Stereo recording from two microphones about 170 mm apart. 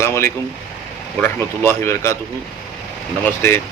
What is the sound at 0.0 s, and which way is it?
Speech, 15° left (ahead or behind).